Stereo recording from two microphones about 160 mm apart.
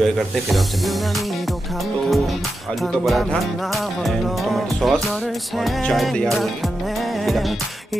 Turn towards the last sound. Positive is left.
turn(degrees=0)  # may be behind; listen again after turning